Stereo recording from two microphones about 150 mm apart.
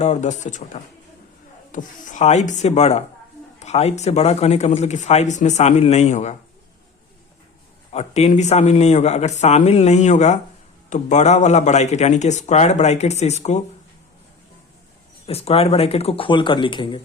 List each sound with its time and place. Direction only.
0.0 s speech: 50° left (ahead or behind)
7.9 s speech: 45° left (ahead or behind)
15.3 s speech: 40° left (ahead or behind)